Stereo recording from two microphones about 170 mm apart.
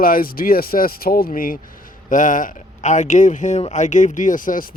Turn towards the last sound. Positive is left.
turn(degrees=50)  # may be behind; listen again after turning